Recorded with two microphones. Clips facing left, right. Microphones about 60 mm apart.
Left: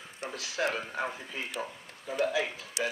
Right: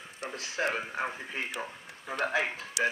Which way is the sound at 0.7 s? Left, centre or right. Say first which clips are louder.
Right 1 dB; right.